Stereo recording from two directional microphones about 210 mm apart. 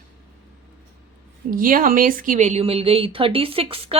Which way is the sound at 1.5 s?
40° right (ahead or behind).